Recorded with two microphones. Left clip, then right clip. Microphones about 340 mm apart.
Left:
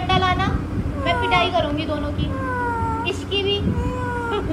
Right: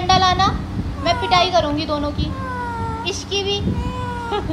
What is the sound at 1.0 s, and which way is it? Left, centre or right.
Children playing, centre.